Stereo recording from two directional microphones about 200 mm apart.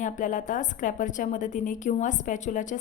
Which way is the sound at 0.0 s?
40° left (ahead or behind).